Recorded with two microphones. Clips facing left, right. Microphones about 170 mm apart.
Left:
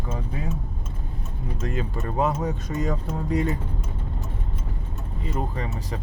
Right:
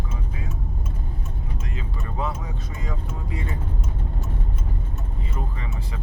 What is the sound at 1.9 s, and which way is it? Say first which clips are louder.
Speech: left 4 dB; 45° left (ahead or behind).